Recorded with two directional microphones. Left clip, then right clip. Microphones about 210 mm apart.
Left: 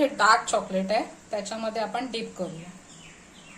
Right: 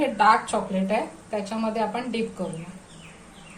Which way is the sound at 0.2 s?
35° left (ahead or behind).